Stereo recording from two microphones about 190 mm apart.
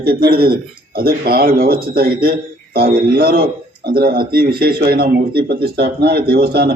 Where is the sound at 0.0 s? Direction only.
55° right (ahead or behind).